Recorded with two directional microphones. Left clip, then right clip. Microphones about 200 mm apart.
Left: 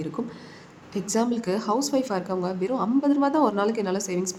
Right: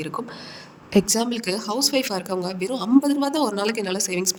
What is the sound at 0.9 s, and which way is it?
A woman's voice, 50° right (ahead or behind).